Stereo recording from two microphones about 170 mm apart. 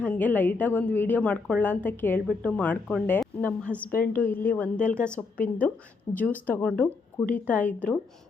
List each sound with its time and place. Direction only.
0.0 s speech: 10° left (ahead or behind)